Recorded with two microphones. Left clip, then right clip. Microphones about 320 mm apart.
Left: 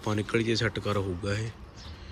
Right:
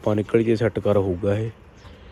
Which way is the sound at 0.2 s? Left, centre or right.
Left.